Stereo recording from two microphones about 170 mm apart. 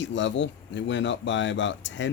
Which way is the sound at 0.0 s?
90° left.